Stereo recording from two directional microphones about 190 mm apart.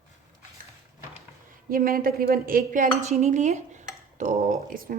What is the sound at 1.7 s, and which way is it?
Speech, 50° right (ahead or behind).